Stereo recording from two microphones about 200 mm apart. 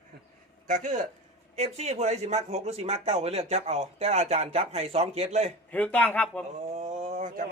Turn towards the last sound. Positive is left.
turn(degrees=-40)  # may be behind; listen again after turning